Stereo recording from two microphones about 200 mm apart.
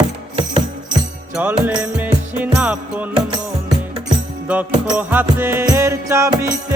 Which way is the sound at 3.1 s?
20° right (ahead or behind).